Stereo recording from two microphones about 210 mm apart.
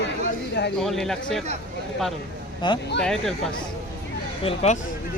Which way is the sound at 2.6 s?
20° left (ahead or behind).